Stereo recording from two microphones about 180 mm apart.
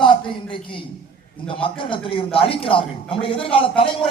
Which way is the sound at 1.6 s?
30° left (ahead or behind).